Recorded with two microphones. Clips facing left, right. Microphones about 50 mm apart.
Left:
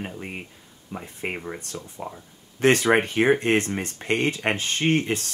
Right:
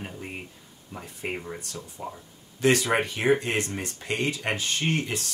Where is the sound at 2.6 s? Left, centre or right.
Left.